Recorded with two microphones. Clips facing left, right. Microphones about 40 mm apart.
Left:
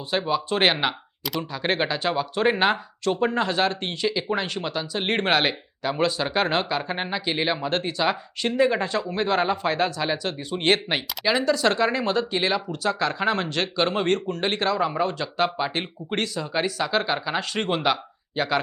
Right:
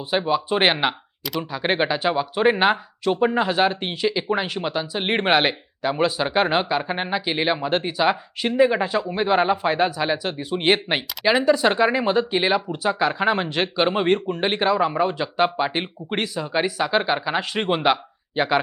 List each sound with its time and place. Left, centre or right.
0.1 s speech: centre